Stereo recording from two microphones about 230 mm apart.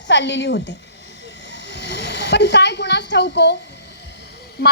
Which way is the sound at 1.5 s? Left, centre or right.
Left.